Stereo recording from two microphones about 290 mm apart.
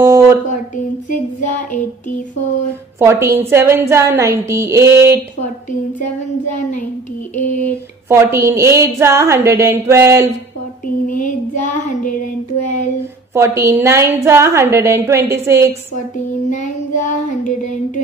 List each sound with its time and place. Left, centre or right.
0.0 s a sound: centre
3.0 s a woman's voice: centre
8.1 s a woman's voice: centre
11.1 s child singing: left
13.3 s a woman's voice: centre
16.4 s child singing: left